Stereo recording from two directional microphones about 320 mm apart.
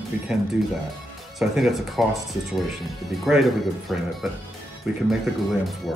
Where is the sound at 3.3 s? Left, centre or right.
Centre.